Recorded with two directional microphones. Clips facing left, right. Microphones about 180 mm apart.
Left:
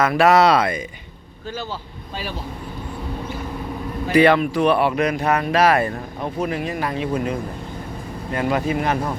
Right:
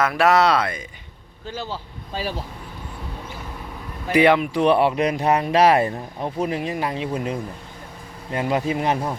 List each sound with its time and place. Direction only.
0.0 s speech: centre (ahead or behind)
1.7 s speech: 35° right (ahead or behind)
4.1 s speech: 15° right (ahead or behind)